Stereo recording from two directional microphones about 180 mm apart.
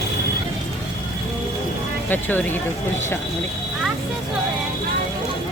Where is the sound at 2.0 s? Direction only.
10° left (ahead or behind).